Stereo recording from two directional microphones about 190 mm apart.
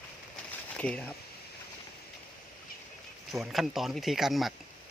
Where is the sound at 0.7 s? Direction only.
5° left (ahead or behind).